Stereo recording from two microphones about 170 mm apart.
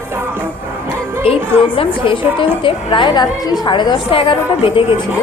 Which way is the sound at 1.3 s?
35° left (ahead or behind).